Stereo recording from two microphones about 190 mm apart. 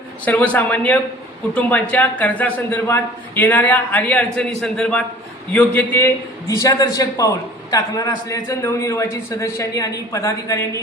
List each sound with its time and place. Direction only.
0.3 s a man's voice: 10° left (ahead or behind)